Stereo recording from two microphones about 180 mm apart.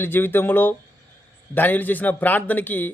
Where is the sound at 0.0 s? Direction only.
10° left (ahead or behind).